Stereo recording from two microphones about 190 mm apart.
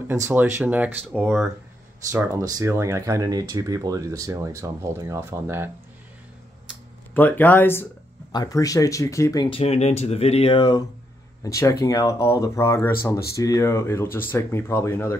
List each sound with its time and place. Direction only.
0.1 s speech: 10° right (ahead or behind)
2.0 s speech: 20° right (ahead or behind)
7.2 s speech: 10° left (ahead or behind)